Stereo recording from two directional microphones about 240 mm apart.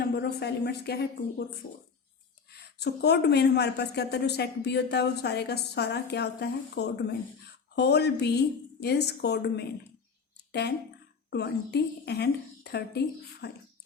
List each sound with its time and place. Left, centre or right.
0.0 s a woman's voice: left
2.5 s speech: left